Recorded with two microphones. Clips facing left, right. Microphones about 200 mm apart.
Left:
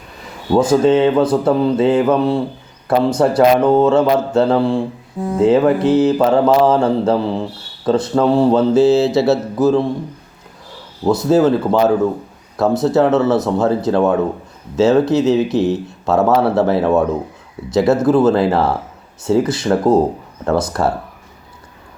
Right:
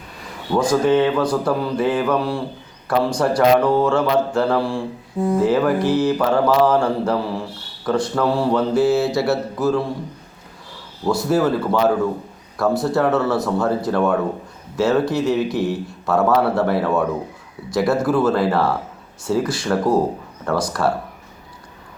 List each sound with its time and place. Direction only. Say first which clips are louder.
0.5 s speech: left 4 dB; 25° left (ahead or behind)
11.0 s speech: left 5 dB; 20° left (ahead or behind)